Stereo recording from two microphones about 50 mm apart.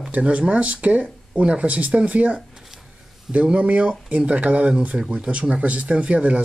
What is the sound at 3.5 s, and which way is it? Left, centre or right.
Speech, right.